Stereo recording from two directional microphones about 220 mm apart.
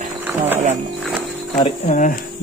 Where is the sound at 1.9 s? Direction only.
35° left (ahead or behind).